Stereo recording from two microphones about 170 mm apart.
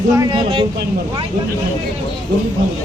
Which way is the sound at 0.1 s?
25° right (ahead or behind).